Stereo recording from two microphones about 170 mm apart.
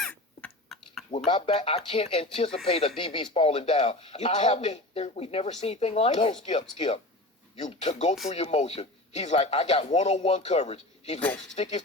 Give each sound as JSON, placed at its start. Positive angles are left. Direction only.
{"t": 0.0, "sound": "a sound", "side_deg": 5}
{"t": 1.3, "sound": "speech", "side_deg": 30}
{"t": 7.5, "sound": "speech", "side_deg": 40}
{"t": 11.2, "sound": "speech", "side_deg": 10}
{"t": 11.5, "sound": "speech", "side_deg": 40}